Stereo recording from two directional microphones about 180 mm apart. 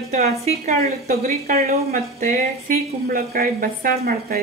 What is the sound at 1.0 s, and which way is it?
A woman's voice, 55° right (ahead or behind).